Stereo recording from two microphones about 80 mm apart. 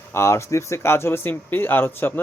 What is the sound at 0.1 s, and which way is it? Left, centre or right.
Speech, left.